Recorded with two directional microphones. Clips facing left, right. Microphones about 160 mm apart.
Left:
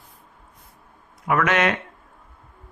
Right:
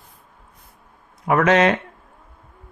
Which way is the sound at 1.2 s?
30° right (ahead or behind).